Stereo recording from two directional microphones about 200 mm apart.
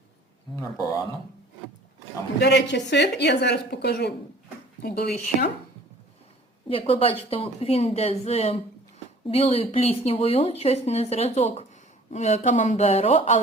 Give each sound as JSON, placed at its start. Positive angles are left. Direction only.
{"t": 0.5, "sound": "a man's voice", "side_deg": 15}
{"t": 2.4, "sound": "a woman's voice", "side_deg": 60}
{"t": 6.7, "sound": "a woman's voice", "side_deg": 25}